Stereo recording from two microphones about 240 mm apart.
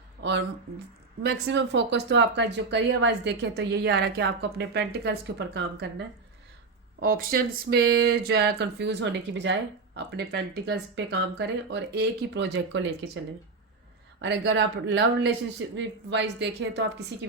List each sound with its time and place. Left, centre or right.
0.2 s a sound: right
1.2 s speech: right
14.2 s speech: right